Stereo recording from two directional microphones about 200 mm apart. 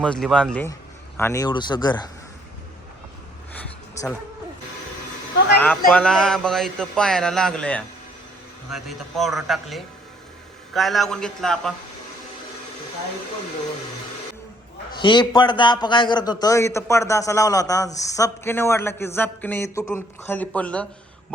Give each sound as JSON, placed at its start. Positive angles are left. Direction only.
{"t": 0.0, "sound": "a man's voice", "side_deg": 0}
{"t": 5.5, "sound": "speech", "side_deg": 5}
{"t": 14.9, "sound": "a man's voice", "side_deg": 25}